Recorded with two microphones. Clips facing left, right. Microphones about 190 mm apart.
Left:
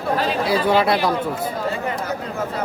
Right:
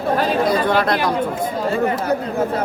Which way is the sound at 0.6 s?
10° left (ahead or behind).